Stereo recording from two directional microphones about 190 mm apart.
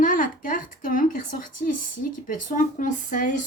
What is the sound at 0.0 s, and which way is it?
A woman's voice, 45° left (ahead or behind).